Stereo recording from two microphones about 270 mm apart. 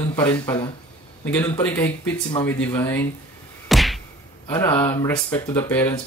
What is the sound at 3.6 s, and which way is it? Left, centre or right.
Whack, centre.